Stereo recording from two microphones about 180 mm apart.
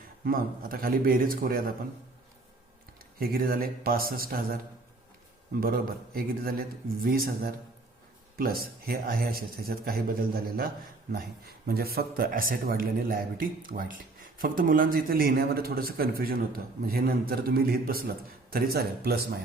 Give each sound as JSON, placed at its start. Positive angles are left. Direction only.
{"t": 0.3, "sound": "a man's voice", "side_deg": -55}
{"t": 3.2, "sound": "speech", "side_deg": -55}